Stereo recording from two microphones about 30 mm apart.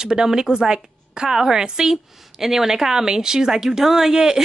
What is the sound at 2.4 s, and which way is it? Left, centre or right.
Speech, centre.